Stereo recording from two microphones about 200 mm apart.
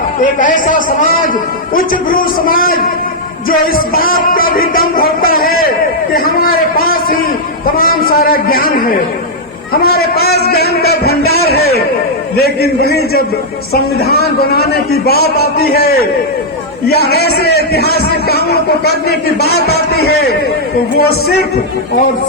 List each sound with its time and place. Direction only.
0.2 s a man's voice: 40° left (ahead or behind)
6.1 s a sound: 45° left (ahead or behind)
7.8 s a man's voice: 45° left (ahead or behind)